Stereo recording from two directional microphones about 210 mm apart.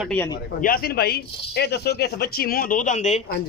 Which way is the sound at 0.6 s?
45° left (ahead or behind).